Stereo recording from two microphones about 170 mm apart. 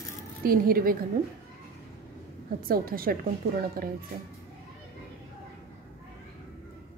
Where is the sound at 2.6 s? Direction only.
60° right (ahead or behind).